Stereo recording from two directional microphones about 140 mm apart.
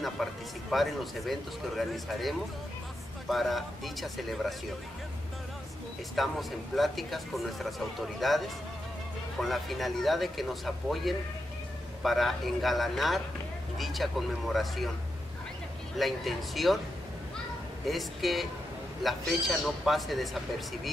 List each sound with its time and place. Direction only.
0.0 s a sound: centre (ahead or behind)
1.8 s a man's voice: centre (ahead or behind)
6.1 s a man's voice: centre (ahead or behind)
16.0 s a man's voice: centre (ahead or behind)
17.8 s a man's voice: centre (ahead or behind)